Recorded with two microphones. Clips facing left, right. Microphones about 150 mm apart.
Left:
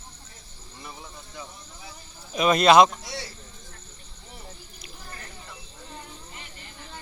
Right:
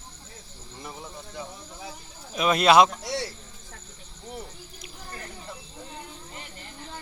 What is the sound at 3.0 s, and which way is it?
Cricket, 75° right (ahead or behind).